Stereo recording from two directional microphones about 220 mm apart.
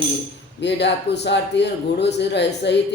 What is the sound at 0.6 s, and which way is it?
Speech, 50° left (ahead or behind).